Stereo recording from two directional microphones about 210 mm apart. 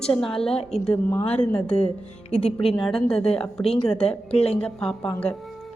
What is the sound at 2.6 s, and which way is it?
Speech, centre (ahead or behind).